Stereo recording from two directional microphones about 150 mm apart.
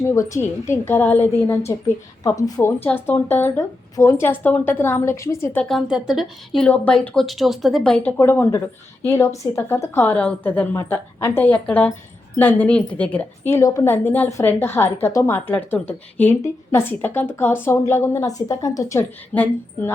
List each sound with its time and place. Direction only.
0.1 s a woman's voice: 20° left (ahead or behind)
5.6 s speech: centre (ahead or behind)
8.2 s a woman's voice: 15° left (ahead or behind)